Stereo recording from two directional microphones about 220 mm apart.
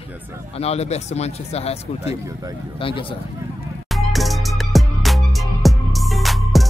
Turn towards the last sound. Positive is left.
turn(degrees=0)  # may be behind; listen again after turning